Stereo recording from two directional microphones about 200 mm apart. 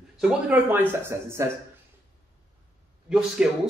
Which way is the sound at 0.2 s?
5° right (ahead or behind).